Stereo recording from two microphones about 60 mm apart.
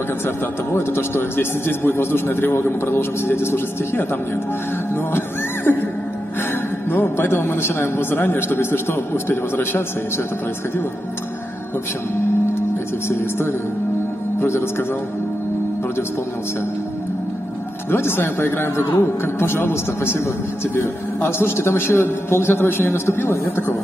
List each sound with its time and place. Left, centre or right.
0.7 s a man's voice: left
4.9 s music: left
6.9 s a man's voice: left
13.1 s a man's voice: left
17.9 s a man's voice: left